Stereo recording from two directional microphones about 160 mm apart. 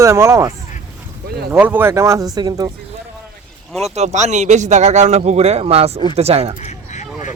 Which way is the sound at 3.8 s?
45° right (ahead or behind).